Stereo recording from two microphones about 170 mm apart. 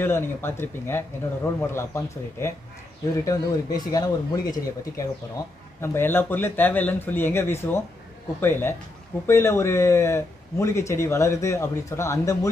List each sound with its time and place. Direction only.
0.0 s speech: 15° left (ahead or behind)